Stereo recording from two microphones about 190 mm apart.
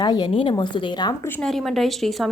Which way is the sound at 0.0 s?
20° left (ahead or behind).